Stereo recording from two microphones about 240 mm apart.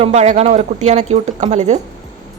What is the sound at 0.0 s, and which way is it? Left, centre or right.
Speech, right.